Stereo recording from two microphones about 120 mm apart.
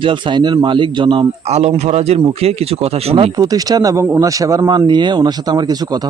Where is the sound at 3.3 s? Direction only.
30° right (ahead or behind).